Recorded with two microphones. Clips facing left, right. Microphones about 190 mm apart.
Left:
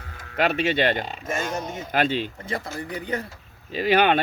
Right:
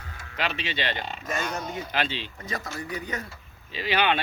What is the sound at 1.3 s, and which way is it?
Speech, 25° left (ahead or behind).